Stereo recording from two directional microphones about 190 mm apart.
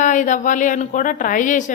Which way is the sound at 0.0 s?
40° left (ahead or behind).